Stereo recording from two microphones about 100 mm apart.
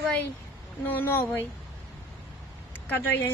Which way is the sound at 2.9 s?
20° left (ahead or behind).